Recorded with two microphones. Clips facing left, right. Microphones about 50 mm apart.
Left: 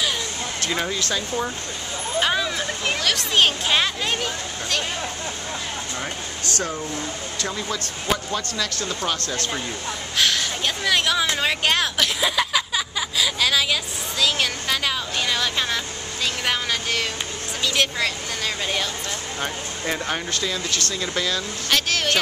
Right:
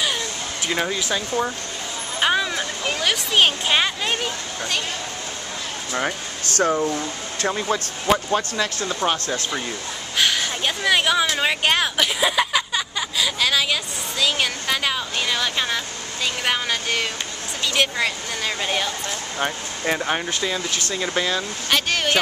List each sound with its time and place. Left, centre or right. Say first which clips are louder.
0.6 s speech: right 2 dB; centre
2.1 s vehicle: right 2 dB; centre
3.0 s speech: right 2 dB; centre
5.9 s speech: right 5 dB; right
10.1 s speech: right 1 dB; centre
21.6 s speech: right 1 dB; centre